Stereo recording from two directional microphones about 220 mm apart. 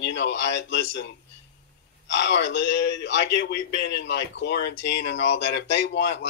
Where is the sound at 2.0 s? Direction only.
50° left (ahead or behind).